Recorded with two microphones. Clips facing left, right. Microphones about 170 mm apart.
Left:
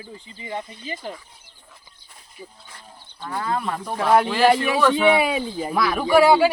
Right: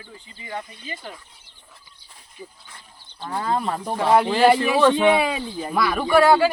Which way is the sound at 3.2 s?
20° right (ahead or behind).